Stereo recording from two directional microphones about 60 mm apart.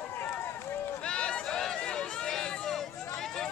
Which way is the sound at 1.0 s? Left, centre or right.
Centre.